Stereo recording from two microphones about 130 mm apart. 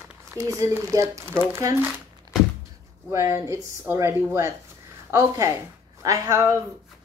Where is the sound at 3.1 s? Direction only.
20° right (ahead or behind).